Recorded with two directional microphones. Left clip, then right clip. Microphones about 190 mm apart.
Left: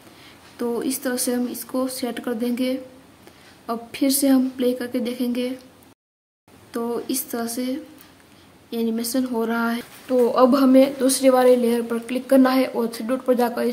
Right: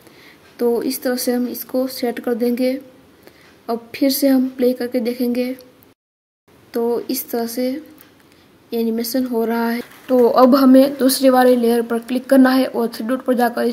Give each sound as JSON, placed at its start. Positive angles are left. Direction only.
{"t": 0.6, "sound": "speech", "side_deg": -15}
{"t": 6.7, "sound": "speech", "side_deg": -15}